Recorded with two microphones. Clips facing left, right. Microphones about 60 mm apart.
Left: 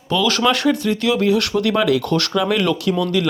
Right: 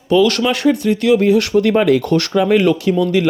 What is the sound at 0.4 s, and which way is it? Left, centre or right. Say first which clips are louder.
Speech: right 2 dB; centre.